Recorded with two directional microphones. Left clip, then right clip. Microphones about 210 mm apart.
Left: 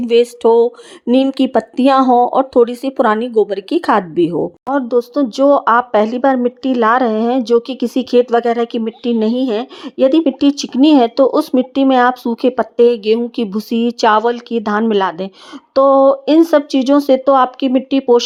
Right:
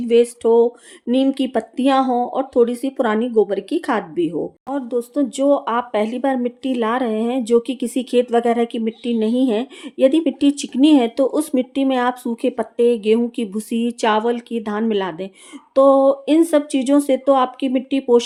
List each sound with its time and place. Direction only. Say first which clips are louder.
0.1 s speech: left 3 dB; 35° left (ahead or behind)
4.7 s speech: left 8 dB; 15° left (ahead or behind)